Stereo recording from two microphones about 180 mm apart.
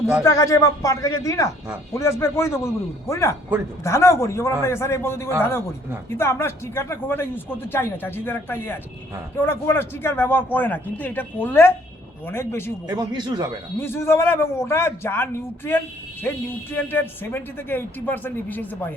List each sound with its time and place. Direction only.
0.3 s speech: 20° left (ahead or behind)
12.9 s speech: 25° right (ahead or behind)
13.7 s speech: 10° left (ahead or behind)